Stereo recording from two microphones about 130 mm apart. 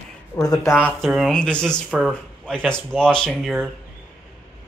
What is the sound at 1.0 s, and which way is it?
Speech, centre (ahead or behind).